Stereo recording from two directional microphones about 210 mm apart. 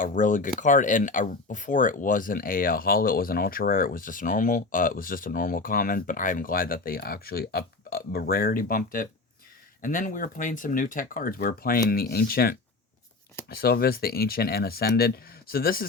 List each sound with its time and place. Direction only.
0.0 s speech: 40° left (ahead or behind)